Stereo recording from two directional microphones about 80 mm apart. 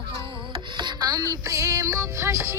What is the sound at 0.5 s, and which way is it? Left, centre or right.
Music, right.